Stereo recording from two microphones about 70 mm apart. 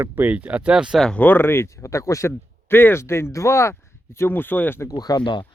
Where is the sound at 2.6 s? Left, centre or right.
Left.